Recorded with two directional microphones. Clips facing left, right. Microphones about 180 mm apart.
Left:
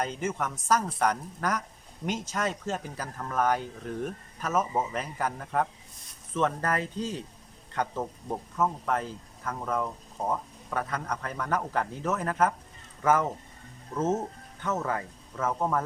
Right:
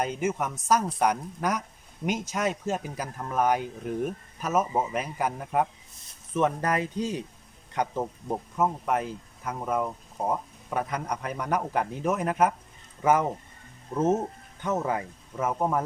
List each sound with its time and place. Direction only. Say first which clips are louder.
0.0 s speech: right 3 dB; 10° right (ahead or behind)